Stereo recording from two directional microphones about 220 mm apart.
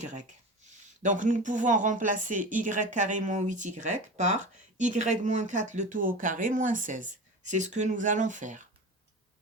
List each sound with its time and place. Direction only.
0.0 s speech: 30° right (ahead or behind)